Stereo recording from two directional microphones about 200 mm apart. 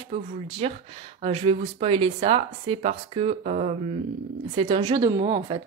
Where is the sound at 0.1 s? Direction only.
30° right (ahead or behind).